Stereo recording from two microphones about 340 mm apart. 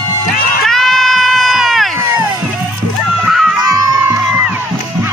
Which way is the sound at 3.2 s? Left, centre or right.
Centre.